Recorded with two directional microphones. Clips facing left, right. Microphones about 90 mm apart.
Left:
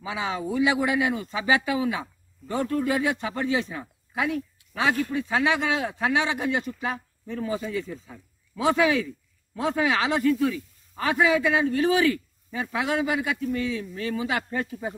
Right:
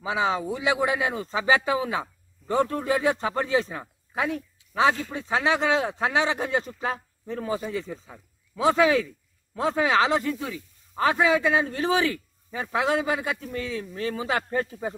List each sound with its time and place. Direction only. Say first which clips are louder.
0.0 s speech: right 4 dB; 25° right (ahead or behind)